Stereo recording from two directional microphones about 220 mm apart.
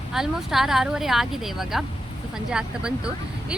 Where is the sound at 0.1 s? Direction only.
Centre (ahead or behind).